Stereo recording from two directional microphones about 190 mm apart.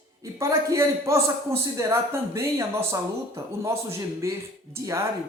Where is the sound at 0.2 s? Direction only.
15° right (ahead or behind).